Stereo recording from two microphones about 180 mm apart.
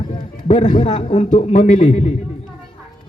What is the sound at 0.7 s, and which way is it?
A man's voice, 45° left (ahead or behind).